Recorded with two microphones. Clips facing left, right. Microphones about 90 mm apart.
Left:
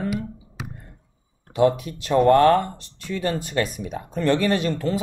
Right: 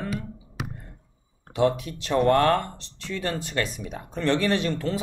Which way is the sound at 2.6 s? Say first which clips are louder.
Left 6 dB; 10° left (ahead or behind).